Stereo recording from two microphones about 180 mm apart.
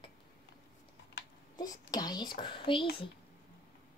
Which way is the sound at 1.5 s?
20° left (ahead or behind).